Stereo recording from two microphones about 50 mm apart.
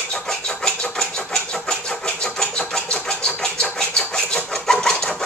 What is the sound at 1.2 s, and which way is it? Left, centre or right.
Engine, centre.